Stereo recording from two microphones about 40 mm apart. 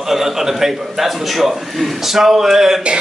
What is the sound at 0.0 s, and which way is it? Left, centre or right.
A man's voice, centre.